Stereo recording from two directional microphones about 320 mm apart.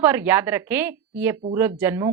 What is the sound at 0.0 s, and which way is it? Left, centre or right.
A woman's voice, centre.